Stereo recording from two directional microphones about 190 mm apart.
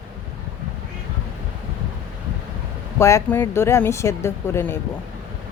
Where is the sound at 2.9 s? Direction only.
15° left (ahead or behind).